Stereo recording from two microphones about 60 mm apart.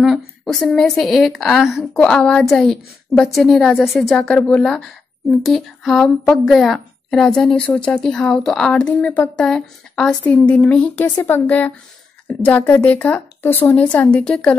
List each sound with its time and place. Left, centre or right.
0.0 s a woman's voice: centre
2.0 s a woman's voice: centre
4.5 s speech: centre
5.4 s a woman's voice: centre; by 9.5 s left
9.5 s speech: centre
10.2 s a woman's voice: left
11.0 s a woman's voice: left
14.1 s speech: centre